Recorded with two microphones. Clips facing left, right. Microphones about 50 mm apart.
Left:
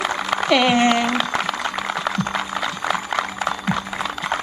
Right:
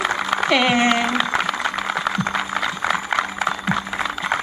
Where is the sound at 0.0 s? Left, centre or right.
Centre.